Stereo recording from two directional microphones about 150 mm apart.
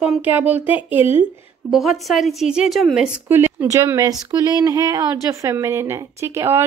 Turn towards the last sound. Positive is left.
turn(degrees=-15)  # may be behind; listen again after turning